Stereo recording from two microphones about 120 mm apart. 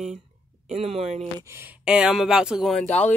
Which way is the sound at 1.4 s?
20° right (ahead or behind).